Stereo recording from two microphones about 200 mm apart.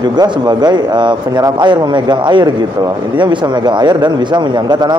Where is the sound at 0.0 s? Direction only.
20° right (ahead or behind).